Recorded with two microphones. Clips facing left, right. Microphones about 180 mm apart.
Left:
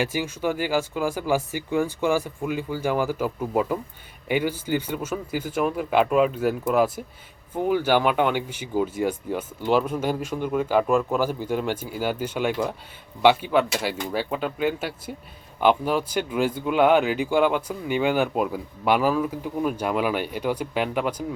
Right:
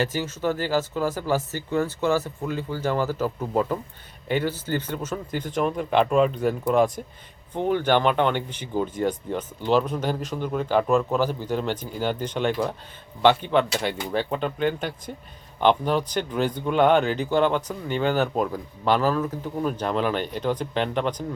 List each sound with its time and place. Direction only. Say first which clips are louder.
0.0 s speech: even; 10° left (ahead or behind)